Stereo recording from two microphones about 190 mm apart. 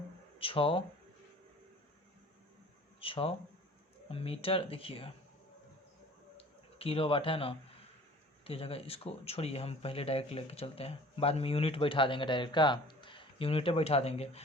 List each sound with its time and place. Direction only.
0.3 s speech: 30° left (ahead or behind)
3.0 s speech: 30° left (ahead or behind)
6.3 s a sound: 30° left (ahead or behind)
8.4 s speech: 30° left (ahead or behind)